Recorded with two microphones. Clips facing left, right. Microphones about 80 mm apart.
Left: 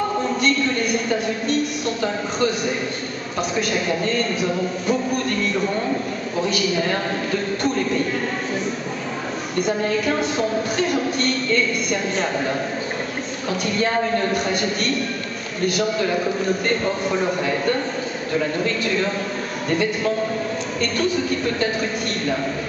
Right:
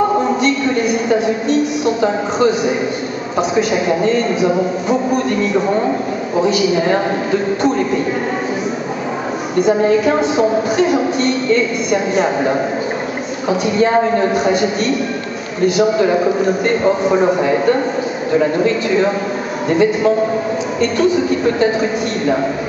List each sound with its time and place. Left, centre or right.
0.4 s a woman's voice: centre
5.7 s a man's voice: right
6.4 s a woman's voice: centre
9.8 s a woman's voice: centre
14.3 s a woman's voice: centre